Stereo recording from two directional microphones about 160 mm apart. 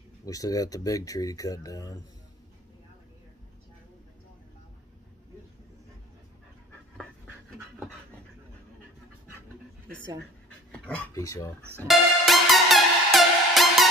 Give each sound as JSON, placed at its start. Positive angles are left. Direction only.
{"t": 0.2, "sound": "speech", "side_deg": 20}
{"t": 10.7, "sound": "pant", "side_deg": 10}
{"t": 11.1, "sound": "speech", "side_deg": 20}
{"t": 11.9, "sound": "music", "side_deg": 0}